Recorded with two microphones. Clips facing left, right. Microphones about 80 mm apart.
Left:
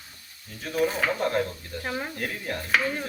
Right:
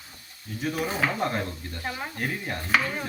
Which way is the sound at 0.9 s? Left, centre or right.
Centre.